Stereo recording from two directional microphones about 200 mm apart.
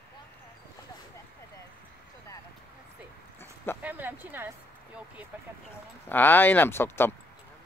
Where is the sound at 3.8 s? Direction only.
10° right (ahead or behind).